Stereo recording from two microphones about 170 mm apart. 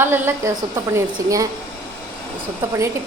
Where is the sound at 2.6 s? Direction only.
15° right (ahead or behind).